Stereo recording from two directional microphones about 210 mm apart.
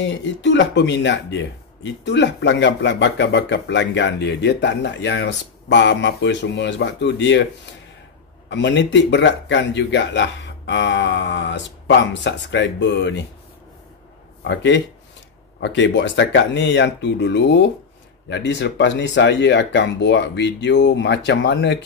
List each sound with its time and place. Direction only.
0.0 s speech: 60° left (ahead or behind)
8.5 s speech: 55° left (ahead or behind)
14.4 s speech: 60° left (ahead or behind)